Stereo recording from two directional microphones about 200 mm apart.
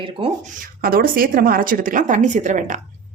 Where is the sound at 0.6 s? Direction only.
45° right (ahead or behind).